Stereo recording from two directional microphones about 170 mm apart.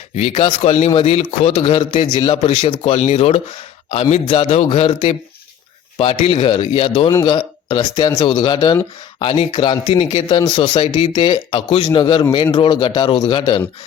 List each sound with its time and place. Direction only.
0.2 s speech: 35° left (ahead or behind)
6.2 s speech: 30° left (ahead or behind)
11.1 s speech: 25° left (ahead or behind)